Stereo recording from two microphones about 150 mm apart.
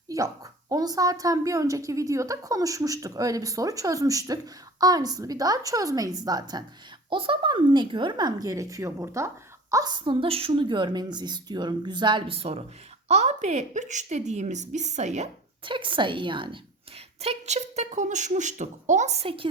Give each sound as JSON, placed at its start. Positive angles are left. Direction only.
{"t": 0.1, "sound": "a sound", "side_deg": -20}
{"t": 0.7, "sound": "speech", "side_deg": -25}
{"t": 15.6, "sound": "a woman's voice", "side_deg": -35}
{"t": 17.2, "sound": "speech", "side_deg": -45}